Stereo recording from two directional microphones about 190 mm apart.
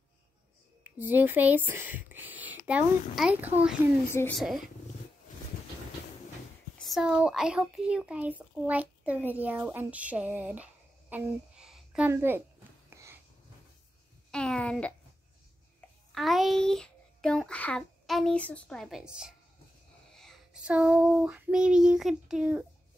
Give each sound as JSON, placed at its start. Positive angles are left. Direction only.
{"t": 0.9, "sound": "speech", "side_deg": -10}
{"t": 6.8, "sound": "a child's voice", "side_deg": 0}
{"t": 12.9, "sound": "wheeze", "side_deg": -15}
{"t": 14.3, "sound": "a sound", "side_deg": 5}
{"t": 16.1, "sound": "a child's voice", "side_deg": 0}